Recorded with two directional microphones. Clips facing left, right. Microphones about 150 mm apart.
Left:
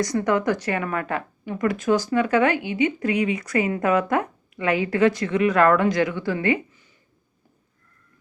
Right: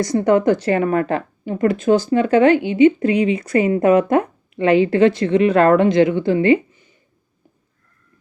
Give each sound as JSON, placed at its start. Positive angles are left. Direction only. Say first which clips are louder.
{"t": 0.0, "sound": "a woman's voice", "louder": "right 6 dB", "side_deg": -30}